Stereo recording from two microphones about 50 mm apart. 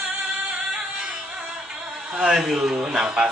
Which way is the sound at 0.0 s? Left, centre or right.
Right.